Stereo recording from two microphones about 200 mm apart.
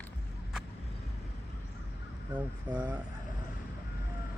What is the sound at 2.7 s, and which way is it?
Speech, 20° right (ahead or behind).